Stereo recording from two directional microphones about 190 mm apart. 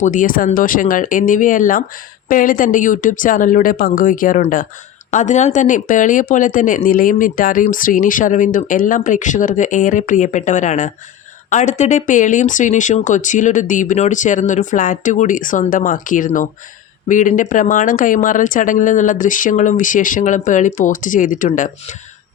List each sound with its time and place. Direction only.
0.0 s speech: 45° left (ahead or behind)